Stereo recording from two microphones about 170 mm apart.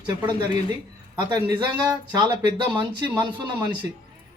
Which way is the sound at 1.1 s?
25° right (ahead or behind).